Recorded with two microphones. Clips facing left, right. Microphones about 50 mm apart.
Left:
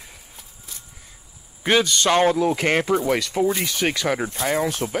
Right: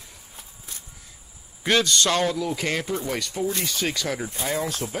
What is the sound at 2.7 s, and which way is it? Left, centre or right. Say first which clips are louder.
Speech: left 7 dB; left.